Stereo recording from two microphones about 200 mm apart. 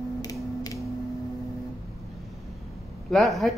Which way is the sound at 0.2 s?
20° left (ahead or behind).